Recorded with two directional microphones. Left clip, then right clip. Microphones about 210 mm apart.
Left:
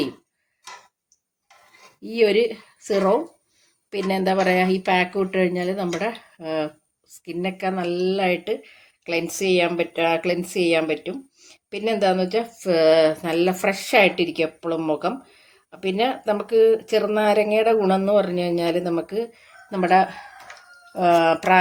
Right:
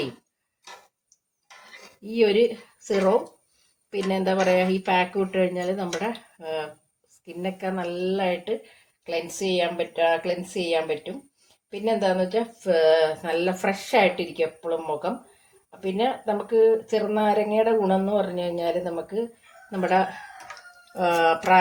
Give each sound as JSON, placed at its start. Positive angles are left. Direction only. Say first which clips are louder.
{"t": 2.0, "sound": "speech", "louder": "left 2 dB", "side_deg": 50}
{"t": 19.7, "sound": "speech", "louder": "left 5 dB", "side_deg": 55}